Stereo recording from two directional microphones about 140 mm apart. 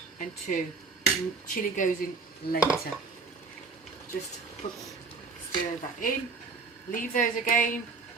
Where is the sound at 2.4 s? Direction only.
90° left.